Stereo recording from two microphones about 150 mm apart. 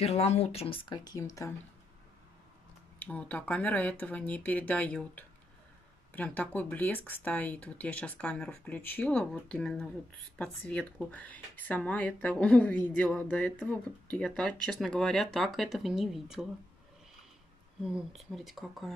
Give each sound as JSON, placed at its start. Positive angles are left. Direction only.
{"t": 0.0, "sound": "speech", "side_deg": 45}
{"t": 3.0, "sound": "speech", "side_deg": 10}
{"t": 17.8, "sound": "speech", "side_deg": 0}